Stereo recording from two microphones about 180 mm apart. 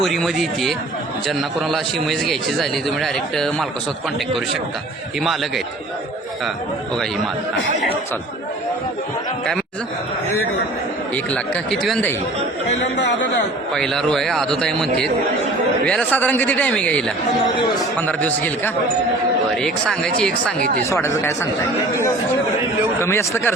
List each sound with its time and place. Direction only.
0.0 s a man's voice: centre (ahead or behind)
5.2 s a man's voice: centre (ahead or behind)
11.1 s a man's voice: 5° left (ahead or behind)
12.8 s speech: 75° left (ahead or behind)
13.7 s a man's voice: centre (ahead or behind)
15.9 s a man's voice: 10° left (ahead or behind)
18.0 s a man's voice: 10° left (ahead or behind)
20.6 s speech: 50° right (ahead or behind)
20.9 s a man's voice: 15° left (ahead or behind)
23.0 s a man's voice: 15° left (ahead or behind)